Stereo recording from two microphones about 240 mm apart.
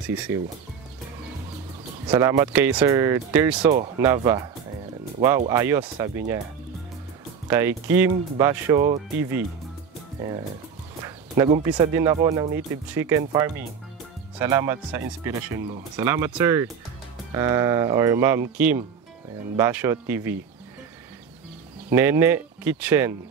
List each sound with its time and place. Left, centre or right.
2.0 s speech: centre
5.5 s speech: centre
7.4 s speech: centre
11.1 s speech: centre
21.9 s speech: centre